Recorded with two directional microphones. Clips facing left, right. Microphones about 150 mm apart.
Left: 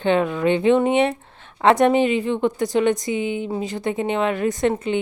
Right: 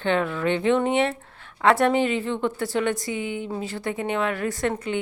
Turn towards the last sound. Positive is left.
turn(degrees=20)  # may be behind; listen again after turning